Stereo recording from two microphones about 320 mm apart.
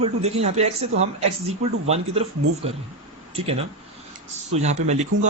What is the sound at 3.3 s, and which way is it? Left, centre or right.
Speech, centre.